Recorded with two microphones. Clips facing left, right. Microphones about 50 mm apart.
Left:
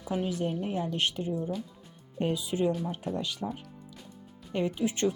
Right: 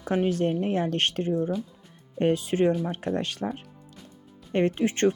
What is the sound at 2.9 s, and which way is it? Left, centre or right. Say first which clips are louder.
Speech: right 5 dB; right.